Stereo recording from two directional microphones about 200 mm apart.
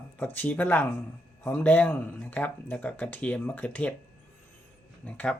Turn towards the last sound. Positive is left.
turn(degrees=5)  # may be behind; listen again after turning